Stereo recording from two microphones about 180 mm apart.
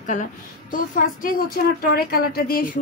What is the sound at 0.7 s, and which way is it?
A woman's voice, 50° left (ahead or behind).